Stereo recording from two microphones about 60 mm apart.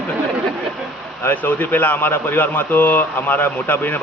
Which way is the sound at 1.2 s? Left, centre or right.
Left.